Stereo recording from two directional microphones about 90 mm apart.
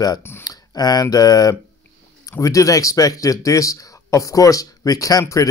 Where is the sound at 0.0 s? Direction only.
45° left (ahead or behind).